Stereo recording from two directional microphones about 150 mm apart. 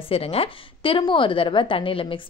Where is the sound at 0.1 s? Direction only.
40° left (ahead or behind).